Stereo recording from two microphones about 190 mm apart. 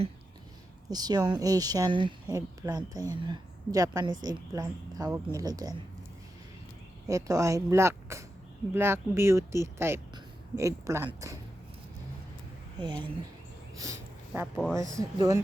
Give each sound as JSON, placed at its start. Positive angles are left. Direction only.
{"t": 0.9, "sound": "speech", "side_deg": -20}
{"t": 7.1, "sound": "speech", "side_deg": -15}
{"t": 12.8, "sound": "speech", "side_deg": -25}
{"t": 13.7, "sound": "a sound", "side_deg": -15}
{"t": 14.5, "sound": "speech", "side_deg": 0}
{"t": 14.9, "sound": "speech", "side_deg": -20}